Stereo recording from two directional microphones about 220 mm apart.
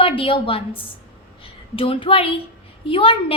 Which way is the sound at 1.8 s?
25° left (ahead or behind).